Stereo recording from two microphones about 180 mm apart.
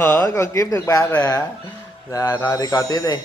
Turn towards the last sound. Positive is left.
turn(degrees=20)  # may be behind; listen again after turning